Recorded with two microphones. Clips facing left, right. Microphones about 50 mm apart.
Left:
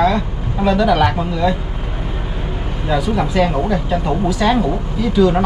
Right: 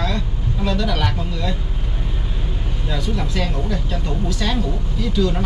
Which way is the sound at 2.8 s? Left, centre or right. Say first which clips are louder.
Left 8 dB; centre.